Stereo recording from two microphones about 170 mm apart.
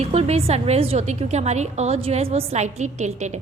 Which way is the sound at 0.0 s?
40° right (ahead or behind).